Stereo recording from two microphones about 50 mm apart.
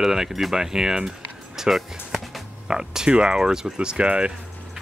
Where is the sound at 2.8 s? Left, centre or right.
Centre.